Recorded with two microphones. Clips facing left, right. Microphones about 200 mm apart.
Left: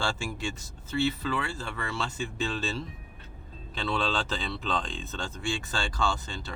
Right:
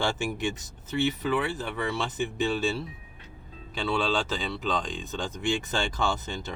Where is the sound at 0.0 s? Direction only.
20° right (ahead or behind).